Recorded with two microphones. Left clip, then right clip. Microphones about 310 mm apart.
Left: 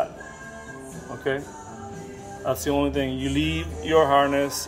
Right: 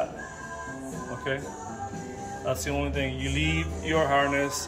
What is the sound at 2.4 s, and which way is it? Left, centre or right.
Speech, centre.